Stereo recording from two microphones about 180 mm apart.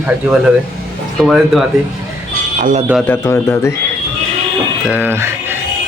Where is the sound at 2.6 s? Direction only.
45° right (ahead or behind).